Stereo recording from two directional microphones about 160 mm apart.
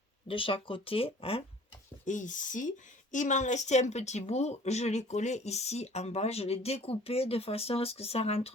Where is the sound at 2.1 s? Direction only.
50° left (ahead or behind).